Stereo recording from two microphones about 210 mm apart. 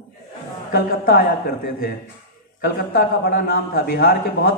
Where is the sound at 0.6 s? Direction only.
45° left (ahead or behind).